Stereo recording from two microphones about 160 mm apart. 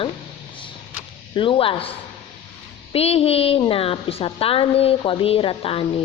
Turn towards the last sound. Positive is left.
turn(degrees=35)  # may be behind; listen again after turning